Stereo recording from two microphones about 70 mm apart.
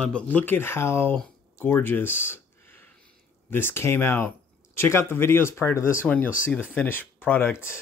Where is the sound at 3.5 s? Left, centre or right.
Left.